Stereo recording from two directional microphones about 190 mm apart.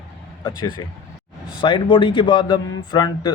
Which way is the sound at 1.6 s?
25° left (ahead or behind).